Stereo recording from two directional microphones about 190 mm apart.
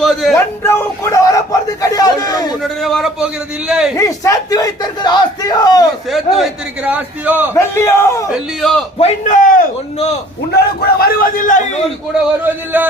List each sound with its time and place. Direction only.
0.0 s speech: centre (ahead or behind)
0.3 s a sound: 10° left (ahead or behind)
1.8 s speech: 20° left (ahead or behind)
2.6 s a man's voice: centre (ahead or behind)
3.9 s speech: 15° left (ahead or behind)
6.1 s a man's voice: centre (ahead or behind)
7.5 s a man's voice: 15° left (ahead or behind)
8.3 s a man's voice: centre (ahead or behind)
9.0 s a man's voice: 35° left (ahead or behind)
10.5 s a man's voice: 55° left (ahead or behind)
12.4 s a man's voice: 10° right (ahead or behind)